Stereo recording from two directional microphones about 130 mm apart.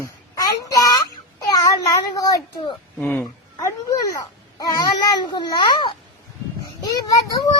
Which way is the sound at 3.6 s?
25° left (ahead or behind).